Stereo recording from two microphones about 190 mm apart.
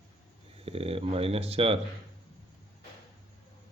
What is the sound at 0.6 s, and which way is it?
Speech, 30° right (ahead or behind).